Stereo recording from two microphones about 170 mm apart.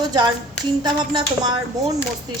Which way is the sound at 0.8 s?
25° right (ahead or behind).